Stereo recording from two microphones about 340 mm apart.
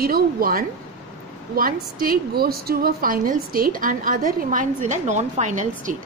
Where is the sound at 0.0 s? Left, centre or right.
Right.